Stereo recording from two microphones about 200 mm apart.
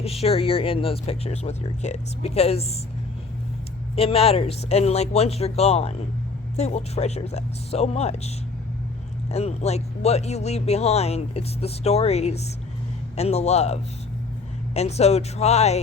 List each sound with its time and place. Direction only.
0.0 s speech: 30° left (ahead or behind)
3.9 s speech: 30° left (ahead or behind)
9.3 s speech: 35° left (ahead or behind)